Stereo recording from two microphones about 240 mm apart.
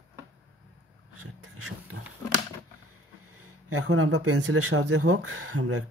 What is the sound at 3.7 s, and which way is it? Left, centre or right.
Speech, right.